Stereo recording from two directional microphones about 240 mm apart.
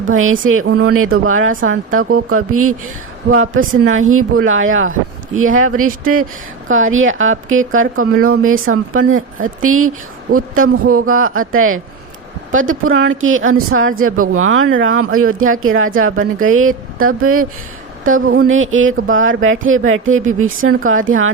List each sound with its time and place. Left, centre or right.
0.1 s speech: right